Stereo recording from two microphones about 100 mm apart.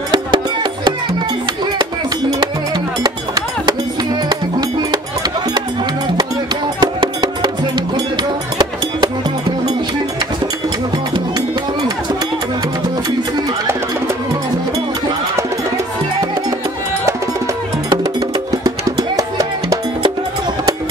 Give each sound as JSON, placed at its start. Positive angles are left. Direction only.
{"t": 3.0, "sound": "music", "side_deg": -40}
{"t": 6.8, "sound": "music", "side_deg": -50}
{"t": 18.6, "sound": "music", "side_deg": -35}